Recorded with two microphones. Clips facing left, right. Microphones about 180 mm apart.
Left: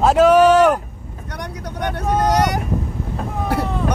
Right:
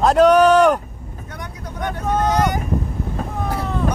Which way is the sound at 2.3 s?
75° left (ahead or behind).